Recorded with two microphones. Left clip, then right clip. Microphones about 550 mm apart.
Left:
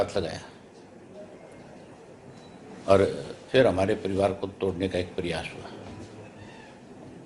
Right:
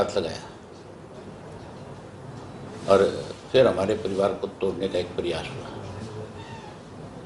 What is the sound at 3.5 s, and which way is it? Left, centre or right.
A man's voice, left.